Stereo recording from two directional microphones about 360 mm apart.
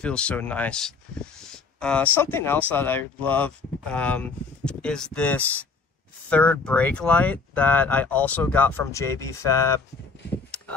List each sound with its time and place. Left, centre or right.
0.0 s speech: centre